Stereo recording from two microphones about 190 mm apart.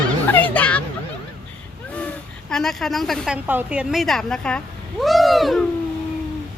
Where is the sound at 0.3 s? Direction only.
10° left (ahead or behind).